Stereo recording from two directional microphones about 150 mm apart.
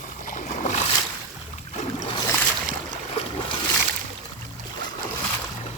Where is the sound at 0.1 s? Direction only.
55° left (ahead or behind).